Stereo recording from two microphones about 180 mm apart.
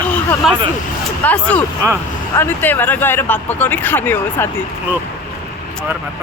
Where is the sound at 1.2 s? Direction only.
10° left (ahead or behind).